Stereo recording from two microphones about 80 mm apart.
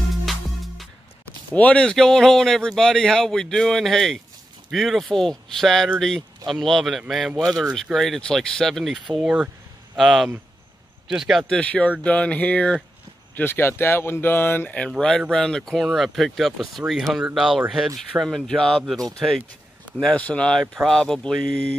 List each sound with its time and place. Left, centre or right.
0.1 s music: centre
1.5 s speech: centre
9.2 s speech: centre
9.9 s speech: centre
11.4 s a sound: centre
13.3 s speech: left
14.7 s a sound: centre
15.3 s speech: centre
20.0 s a sound: centre